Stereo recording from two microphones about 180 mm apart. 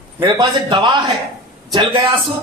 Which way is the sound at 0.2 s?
25° right (ahead or behind).